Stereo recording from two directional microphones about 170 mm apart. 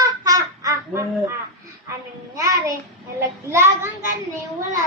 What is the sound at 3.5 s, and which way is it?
Child singing, 15° right (ahead or behind).